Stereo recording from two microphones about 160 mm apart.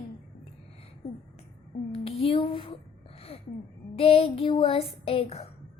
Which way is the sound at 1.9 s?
40° left (ahead or behind).